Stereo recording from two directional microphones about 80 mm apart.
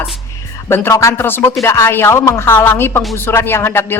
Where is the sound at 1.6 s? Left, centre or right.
Left.